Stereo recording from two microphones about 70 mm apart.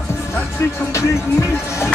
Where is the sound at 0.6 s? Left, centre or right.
Left.